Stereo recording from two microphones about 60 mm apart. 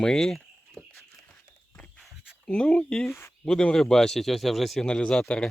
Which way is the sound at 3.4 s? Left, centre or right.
Centre.